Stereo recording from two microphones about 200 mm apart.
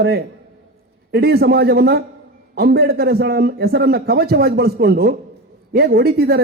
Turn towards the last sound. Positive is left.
turn(degrees=-50)  # may be behind; listen again after turning